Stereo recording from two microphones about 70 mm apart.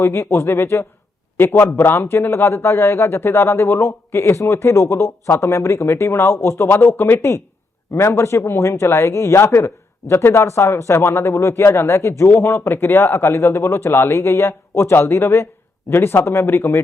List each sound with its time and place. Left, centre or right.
0.0 s a man's voice: left